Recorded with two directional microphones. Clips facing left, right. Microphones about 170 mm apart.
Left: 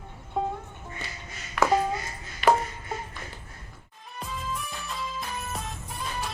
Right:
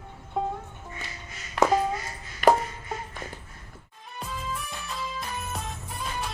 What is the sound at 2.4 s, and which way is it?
Music, 45° right (ahead or behind).